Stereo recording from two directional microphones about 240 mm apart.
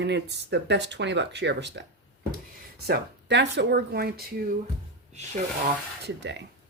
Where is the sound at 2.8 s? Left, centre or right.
Right.